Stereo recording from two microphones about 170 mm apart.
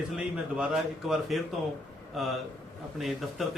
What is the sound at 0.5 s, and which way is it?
A man's voice, 5° right (ahead or behind).